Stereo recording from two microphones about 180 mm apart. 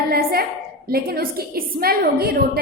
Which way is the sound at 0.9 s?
60° right (ahead or behind).